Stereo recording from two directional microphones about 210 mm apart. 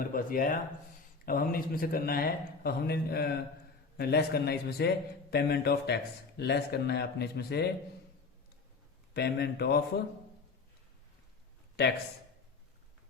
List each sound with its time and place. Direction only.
0.0 s a man's voice: 45° left (ahead or behind)
9.1 s a man's voice: 50° left (ahead or behind)